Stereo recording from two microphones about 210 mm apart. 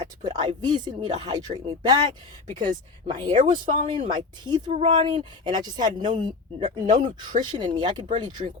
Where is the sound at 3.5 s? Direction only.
20° right (ahead or behind).